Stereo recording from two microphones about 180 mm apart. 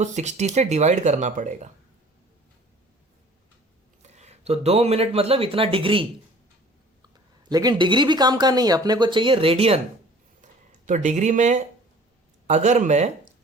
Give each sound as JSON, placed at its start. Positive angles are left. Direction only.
{"t": 0.0, "sound": "speech", "side_deg": -40}
{"t": 4.0, "sound": "speech", "side_deg": -40}
{"t": 7.5, "sound": "speech", "side_deg": -20}
{"t": 10.7, "sound": "speech", "side_deg": -45}